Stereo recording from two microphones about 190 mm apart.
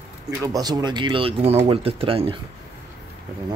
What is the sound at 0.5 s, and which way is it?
Speech, 20° right (ahead or behind).